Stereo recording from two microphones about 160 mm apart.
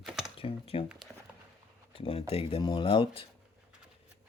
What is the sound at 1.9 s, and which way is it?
Speech, 35° left (ahead or behind).